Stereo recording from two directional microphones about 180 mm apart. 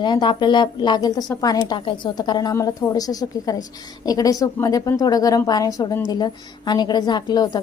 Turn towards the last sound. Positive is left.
turn(degrees=20)  # may be behind; listen again after turning